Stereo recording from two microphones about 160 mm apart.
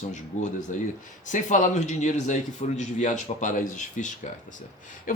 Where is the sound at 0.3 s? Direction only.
45° left (ahead or behind).